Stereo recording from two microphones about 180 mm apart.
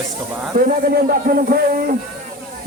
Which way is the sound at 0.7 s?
55° right (ahead or behind).